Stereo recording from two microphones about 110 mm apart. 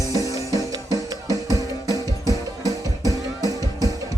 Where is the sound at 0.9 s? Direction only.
30° right (ahead or behind).